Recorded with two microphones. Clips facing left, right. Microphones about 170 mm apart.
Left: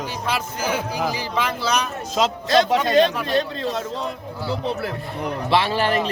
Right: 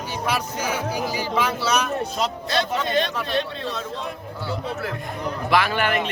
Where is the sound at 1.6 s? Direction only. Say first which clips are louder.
Even; 5° right (ahead or behind).